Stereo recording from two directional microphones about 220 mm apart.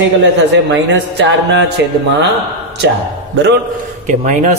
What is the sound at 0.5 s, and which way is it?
Speech, 50° right (ahead or behind).